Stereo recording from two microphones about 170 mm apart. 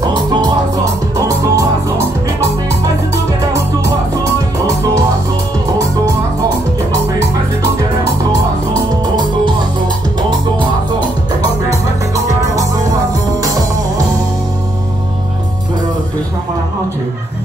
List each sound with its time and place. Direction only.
1.1 s music: 20° right (ahead or behind)